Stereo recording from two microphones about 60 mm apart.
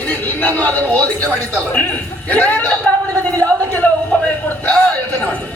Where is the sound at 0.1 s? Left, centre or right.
Left.